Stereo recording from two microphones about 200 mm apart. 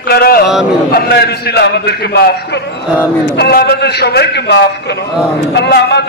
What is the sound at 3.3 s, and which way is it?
A man's voice, 55° left (ahead or behind).